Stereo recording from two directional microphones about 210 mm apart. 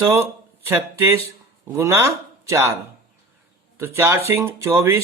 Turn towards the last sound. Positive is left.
turn(degrees=-10)  # may be behind; listen again after turning